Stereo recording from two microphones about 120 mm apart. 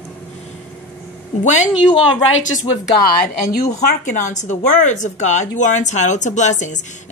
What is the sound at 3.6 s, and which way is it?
Speech, 90° left.